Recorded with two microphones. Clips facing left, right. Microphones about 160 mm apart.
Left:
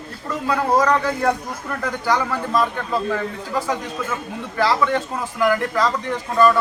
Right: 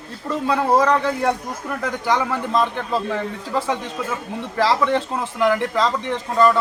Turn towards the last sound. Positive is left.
turn(degrees=-25)  # may be behind; listen again after turning